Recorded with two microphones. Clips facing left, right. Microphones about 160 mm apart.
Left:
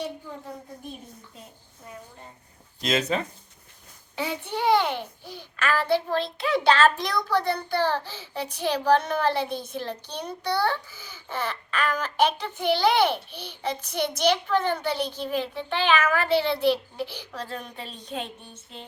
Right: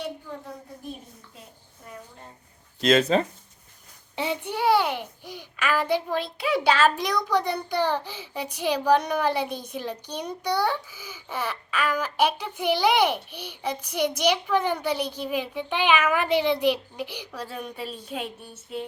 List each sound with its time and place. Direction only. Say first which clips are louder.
2.9 s a child's voice: right 5 dB; 35° right (ahead or behind)
4.4 s a child's voice: even; 5° right (ahead or behind)